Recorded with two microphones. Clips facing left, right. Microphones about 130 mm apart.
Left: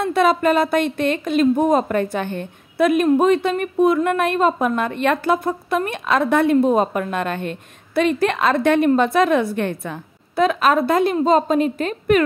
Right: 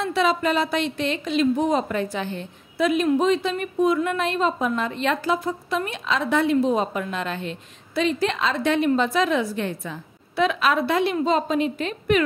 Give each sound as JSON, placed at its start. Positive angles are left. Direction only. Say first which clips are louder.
{"t": 0.0, "sound": "speech", "louder": "left 5 dB", "side_deg": 50}